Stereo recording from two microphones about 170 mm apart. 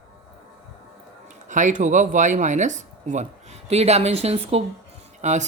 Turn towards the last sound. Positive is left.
turn(degrees=-45)  # may be behind; listen again after turning